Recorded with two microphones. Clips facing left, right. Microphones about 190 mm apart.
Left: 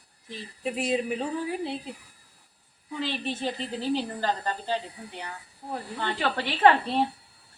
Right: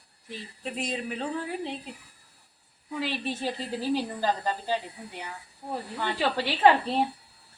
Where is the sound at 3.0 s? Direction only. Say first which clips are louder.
Left 1 dB; 10° right (ahead or behind).